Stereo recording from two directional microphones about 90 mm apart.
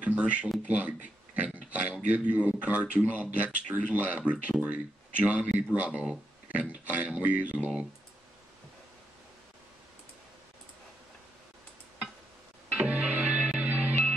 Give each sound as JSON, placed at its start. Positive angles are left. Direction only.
{"t": 0.0, "sound": "speech", "side_deg": -15}
{"t": 0.7, "sound": "a sound", "side_deg": -15}
{"t": 2.0, "sound": "speech", "side_deg": -15}
{"t": 12.7, "sound": "music", "side_deg": -10}